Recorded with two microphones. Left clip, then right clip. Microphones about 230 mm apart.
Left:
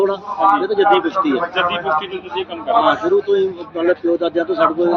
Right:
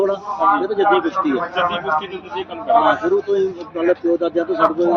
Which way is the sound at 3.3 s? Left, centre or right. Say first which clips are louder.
Left 2 dB; centre.